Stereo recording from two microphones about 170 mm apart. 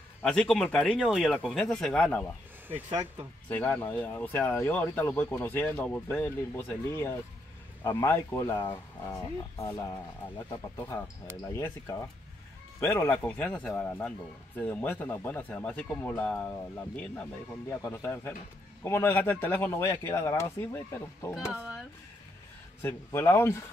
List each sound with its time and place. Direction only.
0.2 s speech: 5° left (ahead or behind)
3.4 s a man's voice: 10° left (ahead or behind)
21.5 s speech: 5° right (ahead or behind)
22.8 s a man's voice: 15° left (ahead or behind)